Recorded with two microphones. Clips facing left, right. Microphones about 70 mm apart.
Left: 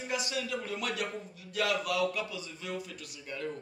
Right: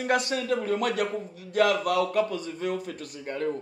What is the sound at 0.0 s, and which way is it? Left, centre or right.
Speech, right.